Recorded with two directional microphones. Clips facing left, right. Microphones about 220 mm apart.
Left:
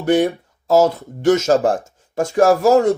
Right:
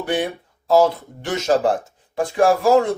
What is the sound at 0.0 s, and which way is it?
Speech, 45° left (ahead or behind).